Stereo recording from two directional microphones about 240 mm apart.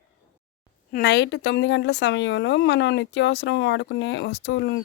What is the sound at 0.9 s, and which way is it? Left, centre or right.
Speech, left.